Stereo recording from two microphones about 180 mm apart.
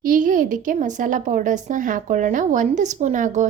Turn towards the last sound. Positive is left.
turn(degrees=-45)  # may be behind; listen again after turning